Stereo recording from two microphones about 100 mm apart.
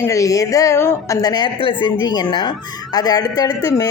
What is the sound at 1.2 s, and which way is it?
Speech, 40° left (ahead or behind).